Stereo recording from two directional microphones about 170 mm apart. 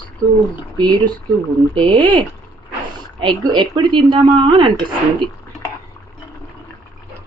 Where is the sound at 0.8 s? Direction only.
25° right (ahead or behind).